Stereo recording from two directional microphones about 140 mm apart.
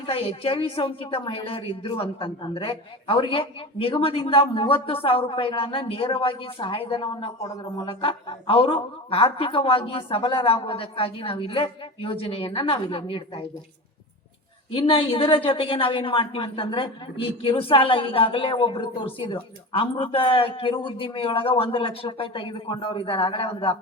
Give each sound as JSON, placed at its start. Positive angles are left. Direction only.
{"t": 0.0, "sound": "a woman's voice", "side_deg": 40}
{"t": 7.3, "sound": "speech", "side_deg": 25}
{"t": 7.9, "sound": "a woman's voice", "side_deg": 40}
{"t": 14.7, "sound": "a woman's voice", "side_deg": 40}